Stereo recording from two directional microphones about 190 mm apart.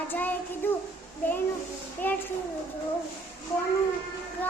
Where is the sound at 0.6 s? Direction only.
10° left (ahead or behind).